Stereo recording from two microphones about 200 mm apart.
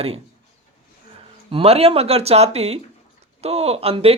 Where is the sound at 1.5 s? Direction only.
30° right (ahead or behind).